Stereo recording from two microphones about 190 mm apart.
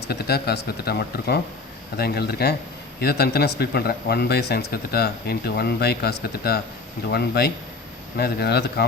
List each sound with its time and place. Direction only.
0.1 s speech: 55° left (ahead or behind)